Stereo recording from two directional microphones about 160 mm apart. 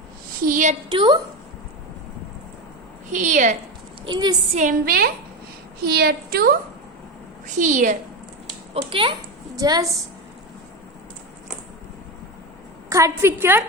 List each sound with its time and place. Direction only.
0.4 s a woman's voice: 55° right (ahead or behind)
0.9 s a woman's voice: 30° right (ahead or behind)
3.1 s a woman's voice: 50° right (ahead or behind)
4.0 s a woman's voice: 30° right (ahead or behind)
4.5 s a woman's voice: 55° right (ahead or behind)
7.4 s a woman's voice: 50° right (ahead or behind)
8.7 s speech: 35° right (ahead or behind)
9.6 s a woman's voice: 25° right (ahead or behind)
12.9 s a woman's voice: 20° right (ahead or behind)